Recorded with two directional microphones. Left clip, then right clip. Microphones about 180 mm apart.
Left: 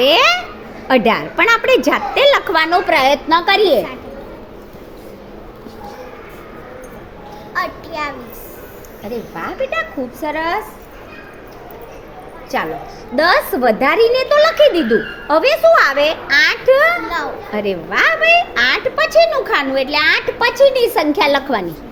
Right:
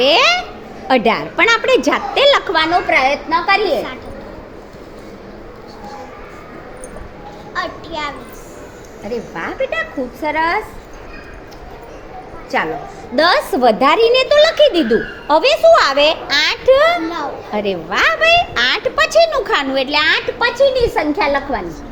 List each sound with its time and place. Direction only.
0.0 s a child's voice: 10° left (ahead or behind)
2.6 s a woman's voice: 30° left (ahead or behind)
7.5 s a sound: 45° left (ahead or behind)
9.0 s speech: centre (ahead or behind)
13.1 s speech: 5° right (ahead or behind)
20.4 s a woman's voice: 15° left (ahead or behind)